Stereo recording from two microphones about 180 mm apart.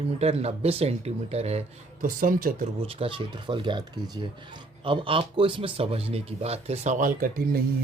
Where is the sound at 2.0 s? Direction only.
50° right (ahead or behind).